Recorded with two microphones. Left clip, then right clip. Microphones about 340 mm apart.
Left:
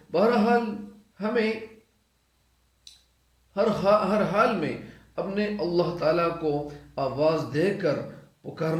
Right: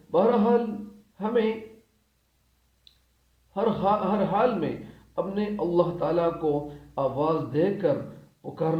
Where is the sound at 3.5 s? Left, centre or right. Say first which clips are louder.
Left 3 dB; centre.